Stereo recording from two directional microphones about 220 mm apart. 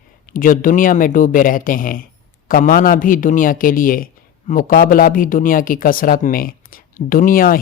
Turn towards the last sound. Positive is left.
turn(degrees=40)  # may be behind; listen again after turning